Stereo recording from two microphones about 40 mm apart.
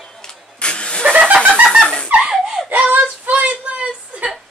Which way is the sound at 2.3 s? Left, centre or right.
Centre.